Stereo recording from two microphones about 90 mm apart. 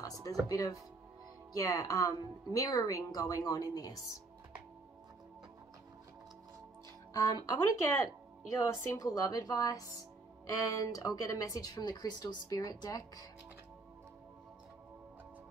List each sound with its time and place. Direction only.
0.0 s speech: 40° left (ahead or behind)
7.2 s speech: 40° left (ahead or behind)